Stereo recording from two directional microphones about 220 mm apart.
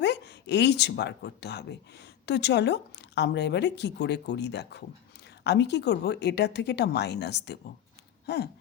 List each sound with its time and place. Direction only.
0.0 s a woman's voice: 50° left (ahead or behind)